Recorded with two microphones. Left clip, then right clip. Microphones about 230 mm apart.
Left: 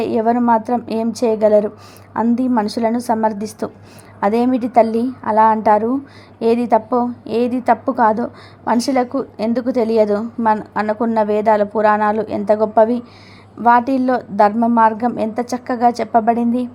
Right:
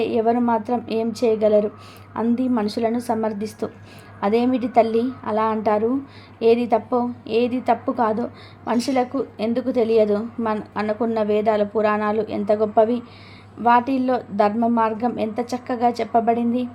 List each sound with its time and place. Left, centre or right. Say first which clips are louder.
0.0 s a woman's voice: left 3 dB; centre
0.3 s a woman's voice: left 6 dB; centre
0.6 s a woman's voice: left 3 dB; centre
3.1 s a woman's voice: left 6 dB; centre
3.3 s a woman's voice: left 3 dB; centre
4.7 s a woman's voice: left 3 dB; centre
6.4 s a woman's voice: left 1 dB; centre
6.7 s a woman's voice: left 5 dB; centre
7.3 s a woman's voice: left 3 dB; centre
7.9 s a woman's voice: left 7 dB; centre
8.8 s a woman's voice: left 4 dB; centre
13.6 s a woman's voice: left 4 dB; centre
15.1 s a woman's voice: left 4 dB; centre